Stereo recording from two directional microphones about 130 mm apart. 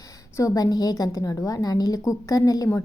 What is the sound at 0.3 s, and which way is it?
A woman's voice, 25° left (ahead or behind).